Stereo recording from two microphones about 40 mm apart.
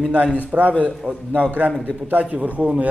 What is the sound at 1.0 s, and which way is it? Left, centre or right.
Speech, right.